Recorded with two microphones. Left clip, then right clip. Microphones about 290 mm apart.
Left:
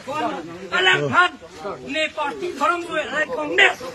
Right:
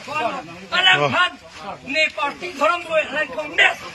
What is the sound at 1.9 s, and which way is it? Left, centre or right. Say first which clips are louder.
A man's voice: right 4 dB; centre.